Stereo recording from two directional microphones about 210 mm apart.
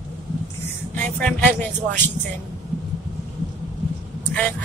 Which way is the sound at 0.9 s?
5° left (ahead or behind).